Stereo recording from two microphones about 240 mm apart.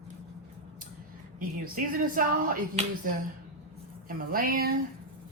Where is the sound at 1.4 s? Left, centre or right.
Right.